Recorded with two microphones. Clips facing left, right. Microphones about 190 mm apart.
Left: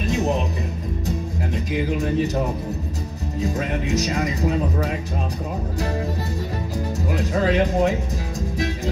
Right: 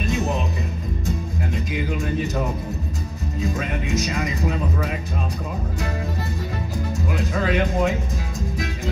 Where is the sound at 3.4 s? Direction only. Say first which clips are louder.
Left 2 dB; 35° left (ahead or behind).